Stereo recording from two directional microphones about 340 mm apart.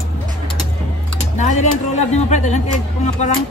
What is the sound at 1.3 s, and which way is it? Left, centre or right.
Speech, left.